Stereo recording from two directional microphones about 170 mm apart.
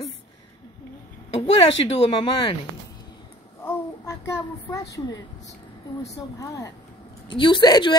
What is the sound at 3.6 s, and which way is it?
A child's voice, 20° left (ahead or behind).